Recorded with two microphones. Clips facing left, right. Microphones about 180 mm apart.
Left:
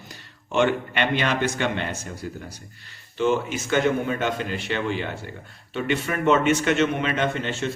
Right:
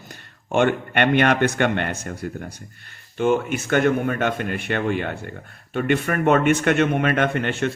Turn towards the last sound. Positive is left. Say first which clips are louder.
# right 3 dB
turn(degrees=-60)  # may be behind; listen again after turning